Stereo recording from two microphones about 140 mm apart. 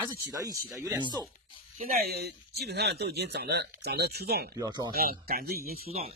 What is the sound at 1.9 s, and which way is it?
Speech, 90° right.